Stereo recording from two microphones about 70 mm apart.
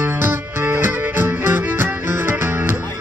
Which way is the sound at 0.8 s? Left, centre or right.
Right.